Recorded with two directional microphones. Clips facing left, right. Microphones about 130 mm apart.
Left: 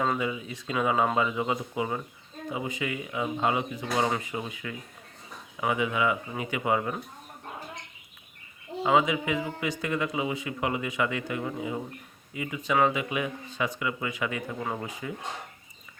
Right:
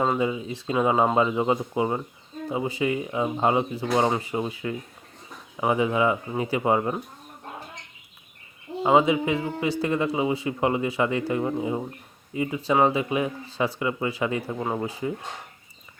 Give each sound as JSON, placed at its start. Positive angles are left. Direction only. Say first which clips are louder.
{"t": 0.0, "sound": "a man's voice", "louder": "right 4 dB", "side_deg": -25}
{"t": 8.8, "sound": "a man's voice", "louder": "right 4 dB", "side_deg": -30}